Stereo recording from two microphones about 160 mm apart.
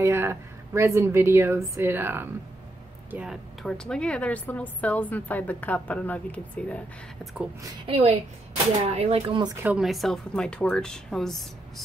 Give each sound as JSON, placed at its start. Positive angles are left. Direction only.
{"t": 0.0, "sound": "a woman's voice", "side_deg": -15}
{"t": 3.6, "sound": "a woman's voice", "side_deg": 5}
{"t": 7.8, "sound": "speech", "side_deg": -35}
{"t": 9.6, "sound": "speech", "side_deg": -5}